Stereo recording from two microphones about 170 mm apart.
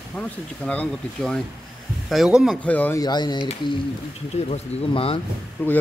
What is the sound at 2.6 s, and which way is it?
Speech, 10° left (ahead or behind).